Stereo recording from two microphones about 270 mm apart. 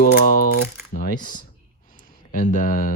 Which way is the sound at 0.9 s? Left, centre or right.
Left.